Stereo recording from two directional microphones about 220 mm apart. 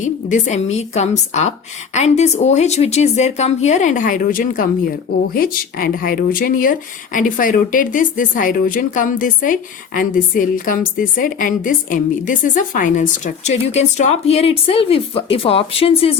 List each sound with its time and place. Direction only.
0.0 s speech: 35° left (ahead or behind)